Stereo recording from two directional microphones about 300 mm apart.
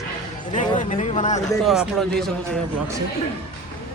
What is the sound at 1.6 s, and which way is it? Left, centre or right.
Speech, centre.